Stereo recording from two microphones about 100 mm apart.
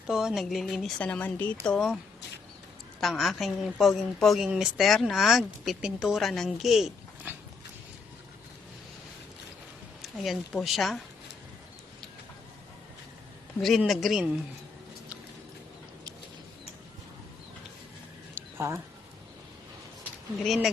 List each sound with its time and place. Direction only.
0.1 s a woman's voice: 5° right (ahead or behind)
0.9 s speech: 15° left (ahead or behind)
3.0 s a woman's voice: centre (ahead or behind)
7.3 s dog: 20° right (ahead or behind)
10.0 s a woman's voice: centre (ahead or behind)
13.6 s a woman's voice: centre (ahead or behind)
18.3 s a sound: 25° right (ahead or behind)
20.4 s a woman's voice: centre (ahead or behind)